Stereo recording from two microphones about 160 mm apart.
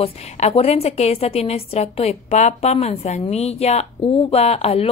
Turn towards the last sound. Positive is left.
turn(degrees=40)  # may be behind; listen again after turning